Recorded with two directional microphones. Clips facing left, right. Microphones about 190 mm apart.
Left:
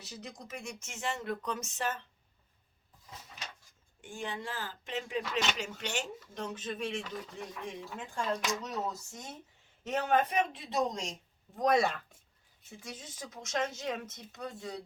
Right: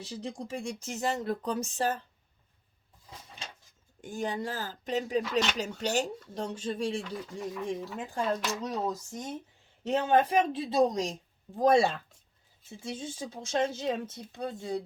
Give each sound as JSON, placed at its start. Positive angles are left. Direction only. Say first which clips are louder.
{"t": 0.0, "sound": "speech", "louder": "right 8 dB", "side_deg": -30}
{"t": 3.1, "sound": "a sound", "louder": "right 1 dB", "side_deg": -30}
{"t": 5.5, "sound": "speech", "louder": "right 7 dB", "side_deg": -40}
{"t": 7.0, "sound": "speech", "louder": "right 5 dB", "side_deg": 0}
{"t": 7.9, "sound": "speech", "louder": "right 1 dB", "side_deg": -35}